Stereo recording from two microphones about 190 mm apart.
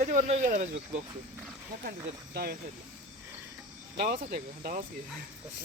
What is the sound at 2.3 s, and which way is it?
Speech, 55° right (ahead or behind).